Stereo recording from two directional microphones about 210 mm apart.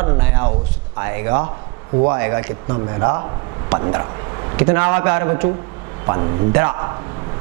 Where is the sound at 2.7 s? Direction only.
20° right (ahead or behind).